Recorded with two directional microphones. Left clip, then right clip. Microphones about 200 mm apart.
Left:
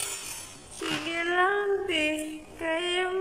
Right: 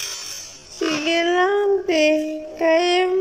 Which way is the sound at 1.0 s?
25° right (ahead or behind).